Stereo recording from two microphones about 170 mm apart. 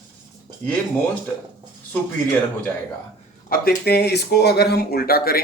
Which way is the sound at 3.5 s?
65° left (ahead or behind).